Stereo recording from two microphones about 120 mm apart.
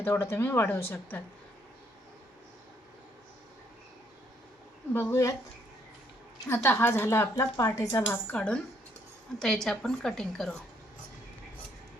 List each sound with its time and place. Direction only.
0.0 s speech: 20° left (ahead or behind)
4.9 s speech: 20° left (ahead or behind)
6.5 s speech: 20° left (ahead or behind)
8.1 s a woman's voice: 10° left (ahead or behind)